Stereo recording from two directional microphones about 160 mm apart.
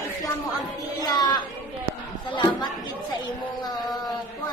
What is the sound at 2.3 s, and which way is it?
Chatter, 30° left (ahead or behind).